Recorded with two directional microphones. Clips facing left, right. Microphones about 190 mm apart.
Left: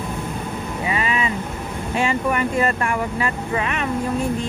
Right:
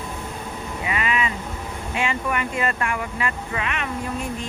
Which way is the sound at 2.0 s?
35° left (ahead or behind).